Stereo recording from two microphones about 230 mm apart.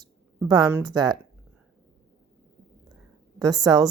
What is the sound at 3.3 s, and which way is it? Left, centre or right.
Speech, centre.